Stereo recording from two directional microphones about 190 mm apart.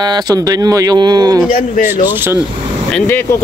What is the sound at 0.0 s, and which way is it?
Speech, 20° right (ahead or behind).